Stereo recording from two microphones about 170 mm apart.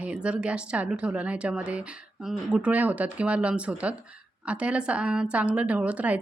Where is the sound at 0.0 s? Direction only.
5° right (ahead or behind).